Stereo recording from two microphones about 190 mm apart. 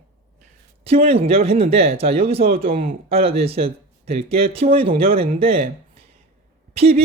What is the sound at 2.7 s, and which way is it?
Speech, 45° right (ahead or behind).